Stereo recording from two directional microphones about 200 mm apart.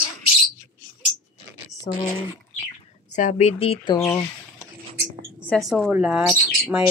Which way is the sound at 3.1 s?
35° left (ahead or behind).